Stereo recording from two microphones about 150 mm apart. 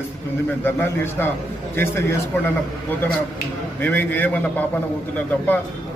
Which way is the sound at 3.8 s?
10° left (ahead or behind).